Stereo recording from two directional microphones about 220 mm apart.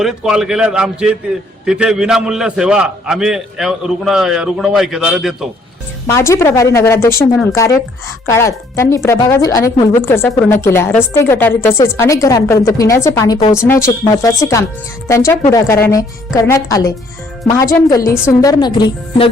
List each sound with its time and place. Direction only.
0.0 s a man's voice: 5° right (ahead or behind)
6.1 s a woman's voice: 10° left (ahead or behind)